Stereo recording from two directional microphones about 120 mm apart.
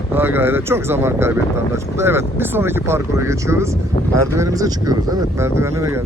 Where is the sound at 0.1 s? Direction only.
15° right (ahead or behind).